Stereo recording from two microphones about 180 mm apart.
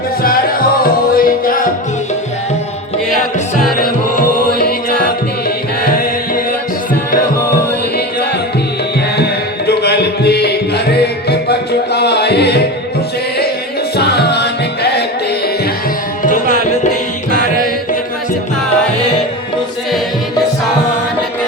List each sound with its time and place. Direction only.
0.8 s music: 55° left (ahead or behind)
3.8 s music: 55° left (ahead or behind)
9.1 s music: 65° left (ahead or behind)
13.9 s music: 65° left (ahead or behind)
16.2 s music: 45° left (ahead or behind)